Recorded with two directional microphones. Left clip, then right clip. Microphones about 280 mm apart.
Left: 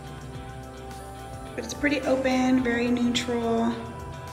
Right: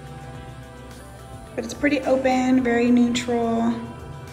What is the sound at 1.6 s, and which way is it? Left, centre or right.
A woman's voice, centre.